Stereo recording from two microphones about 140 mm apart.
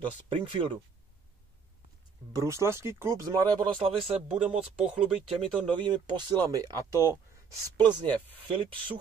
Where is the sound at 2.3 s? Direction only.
20° right (ahead or behind).